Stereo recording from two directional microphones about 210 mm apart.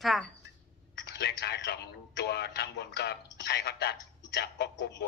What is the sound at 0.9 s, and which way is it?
Speech, 55° left (ahead or behind).